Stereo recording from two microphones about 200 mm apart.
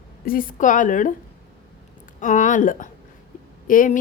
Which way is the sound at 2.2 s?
40° left (ahead or behind).